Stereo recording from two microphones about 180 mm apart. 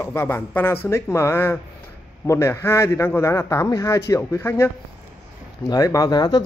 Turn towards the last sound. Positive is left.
turn(degrees=20)  # may be behind; listen again after turning